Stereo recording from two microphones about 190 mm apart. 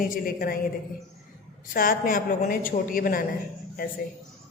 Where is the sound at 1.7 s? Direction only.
50° left (ahead or behind).